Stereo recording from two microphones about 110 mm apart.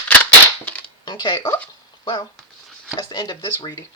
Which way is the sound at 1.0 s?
40° left (ahead or behind).